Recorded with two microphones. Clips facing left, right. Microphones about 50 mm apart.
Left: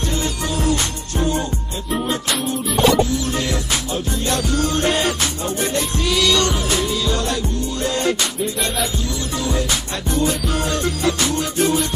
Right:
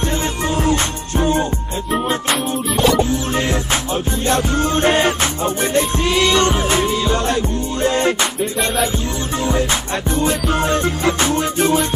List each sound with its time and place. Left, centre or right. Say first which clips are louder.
0.6 s music: right 2 dB; right
9.4 s music: right 4 dB; right